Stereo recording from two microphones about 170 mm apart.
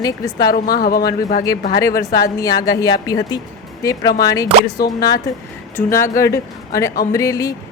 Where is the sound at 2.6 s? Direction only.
20° left (ahead or behind).